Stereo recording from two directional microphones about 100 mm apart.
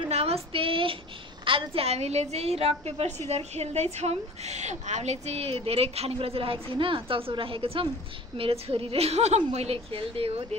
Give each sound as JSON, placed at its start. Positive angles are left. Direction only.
{"t": 0.0, "sound": "female singing", "side_deg": -85}
{"t": 1.4, "sound": "a woman's voice", "side_deg": -65}